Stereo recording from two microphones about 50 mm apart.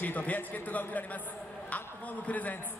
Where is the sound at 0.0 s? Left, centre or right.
Left.